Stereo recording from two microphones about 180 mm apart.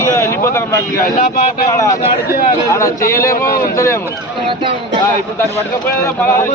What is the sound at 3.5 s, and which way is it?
Speech, 55° left (ahead or behind).